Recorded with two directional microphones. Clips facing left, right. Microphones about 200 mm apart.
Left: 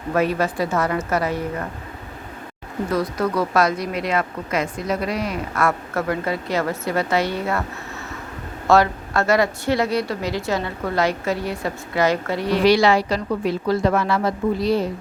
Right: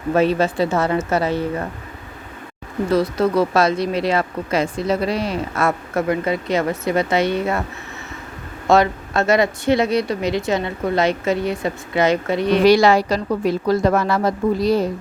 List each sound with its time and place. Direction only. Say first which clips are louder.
0.1 s speech: right 4 dB; 25° right (ahead or behind)
2.9 s speech: right 5 dB; 25° right (ahead or behind)
8.6 s speech: right 1 dB; 20° right (ahead or behind)
12.6 s a woman's voice: right 2 dB; 45° right (ahead or behind)